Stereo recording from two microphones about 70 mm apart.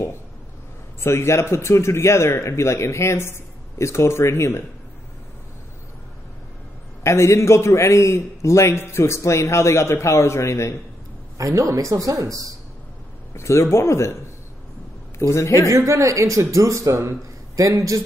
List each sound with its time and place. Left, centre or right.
1.0 s a man's voice: left
7.0 s a man's voice: left
11.3 s speech: right
13.3 s a man's voice: left
15.1 s a man's voice: left
15.7 s speech: right